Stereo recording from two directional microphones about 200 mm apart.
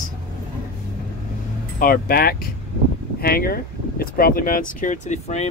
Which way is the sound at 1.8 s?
50° left (ahead or behind).